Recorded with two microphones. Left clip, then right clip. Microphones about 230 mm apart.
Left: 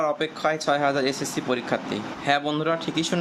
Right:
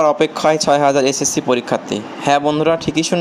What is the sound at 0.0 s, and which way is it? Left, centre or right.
Speech, right.